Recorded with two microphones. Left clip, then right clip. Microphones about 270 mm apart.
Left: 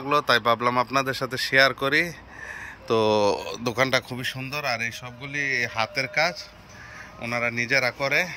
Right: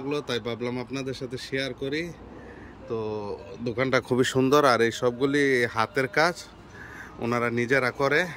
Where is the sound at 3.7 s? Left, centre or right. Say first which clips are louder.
Left 1 dB; centre.